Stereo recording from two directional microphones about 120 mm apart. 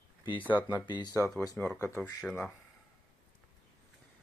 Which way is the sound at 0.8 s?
40° left (ahead or behind).